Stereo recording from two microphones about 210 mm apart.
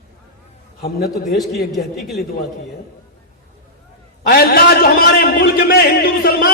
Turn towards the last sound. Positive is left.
turn(degrees=45)  # may be behind; listen again after turning